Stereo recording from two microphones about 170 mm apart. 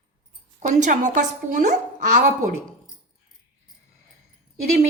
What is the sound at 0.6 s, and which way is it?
A woman's voice, 50° right (ahead or behind).